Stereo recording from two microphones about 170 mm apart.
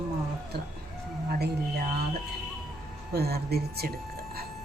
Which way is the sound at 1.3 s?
70° right (ahead or behind).